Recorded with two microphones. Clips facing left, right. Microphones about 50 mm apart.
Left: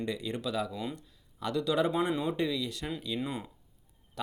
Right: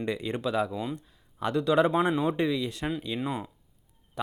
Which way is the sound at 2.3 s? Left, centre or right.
Right.